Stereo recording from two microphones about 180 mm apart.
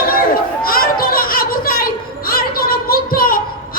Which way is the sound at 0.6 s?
55° left (ahead or behind).